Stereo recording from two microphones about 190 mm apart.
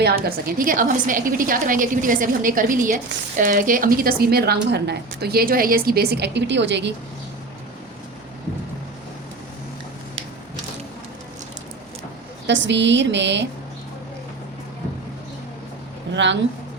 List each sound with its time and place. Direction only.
0.0 s a woman's voice: 50° right (ahead or behind)
12.5 s a woman's voice: 70° right (ahead or behind)
16.1 s a woman's voice: 70° right (ahead or behind)